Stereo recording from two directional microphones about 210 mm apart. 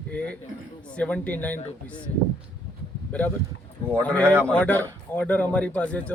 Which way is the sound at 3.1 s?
5° left (ahead or behind).